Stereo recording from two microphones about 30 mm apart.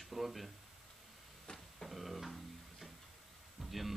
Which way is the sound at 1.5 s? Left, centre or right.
Left.